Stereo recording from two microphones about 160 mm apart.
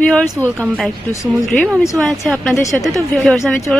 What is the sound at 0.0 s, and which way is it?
Speech, 5° left (ahead or behind).